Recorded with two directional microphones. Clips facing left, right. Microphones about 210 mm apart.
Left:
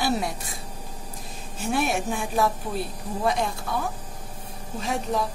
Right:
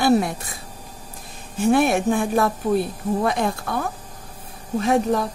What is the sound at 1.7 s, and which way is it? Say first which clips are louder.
A woman's voice: right 8 dB; 55° right (ahead or behind).